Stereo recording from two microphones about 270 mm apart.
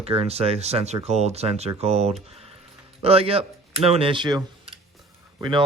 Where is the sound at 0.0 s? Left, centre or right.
Right.